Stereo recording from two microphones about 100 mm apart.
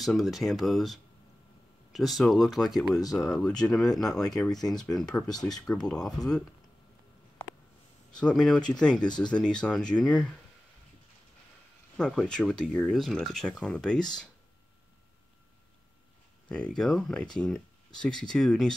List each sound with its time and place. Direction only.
0.0 s speech: centre (ahead or behind)
5.2 s speech: 40° left (ahead or behind)
5.7 s speech: 5° left (ahead or behind)
8.2 s speech: 5° left (ahead or behind)
9.0 s speech: 45° left (ahead or behind)
9.3 s speech: 5° left (ahead or behind)
12.0 s speech: 5° left (ahead or behind)
16.4 s speech: 10° left (ahead or behind)